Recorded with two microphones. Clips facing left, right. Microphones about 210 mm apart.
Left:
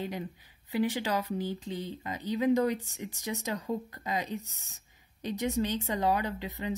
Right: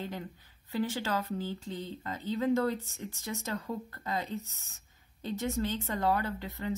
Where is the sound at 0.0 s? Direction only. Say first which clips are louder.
Left 3 dB; 15° left (ahead or behind).